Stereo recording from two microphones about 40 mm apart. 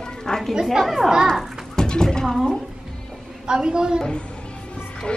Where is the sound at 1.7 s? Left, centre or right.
Centre.